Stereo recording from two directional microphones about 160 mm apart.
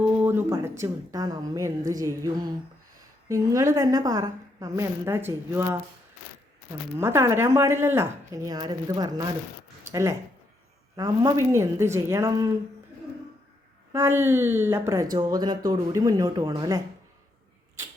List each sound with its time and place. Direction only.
0.2 s a sound: 15° right (ahead or behind)
0.8 s speech: 25° right (ahead or behind)
7.0 s speech: 15° right (ahead or behind)
13.9 s speech: 15° right (ahead or behind)